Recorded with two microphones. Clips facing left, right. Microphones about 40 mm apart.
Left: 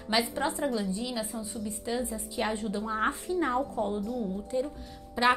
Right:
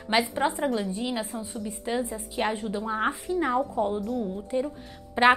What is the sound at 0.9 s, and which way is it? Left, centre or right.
A woman's voice, right.